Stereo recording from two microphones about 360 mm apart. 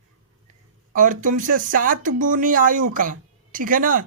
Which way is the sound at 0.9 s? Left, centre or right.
Right.